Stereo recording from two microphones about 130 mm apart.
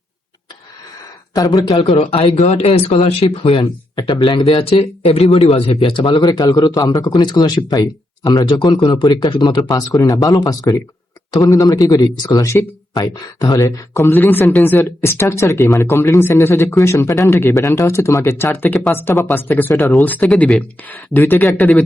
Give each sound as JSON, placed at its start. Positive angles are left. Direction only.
{"t": 1.3, "sound": "speech", "side_deg": 30}
{"t": 1.9, "sound": "speech", "side_deg": 45}
{"t": 3.9, "sound": "speech", "side_deg": 35}
{"t": 4.4, "sound": "speech", "side_deg": 50}
{"t": 6.2, "sound": "speech", "side_deg": 25}
{"t": 20.2, "sound": "speech", "side_deg": 0}